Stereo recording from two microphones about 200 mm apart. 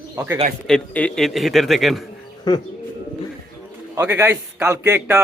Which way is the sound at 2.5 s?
20° left (ahead or behind).